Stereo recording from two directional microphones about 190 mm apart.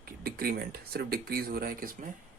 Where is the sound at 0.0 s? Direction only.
50° right (ahead or behind).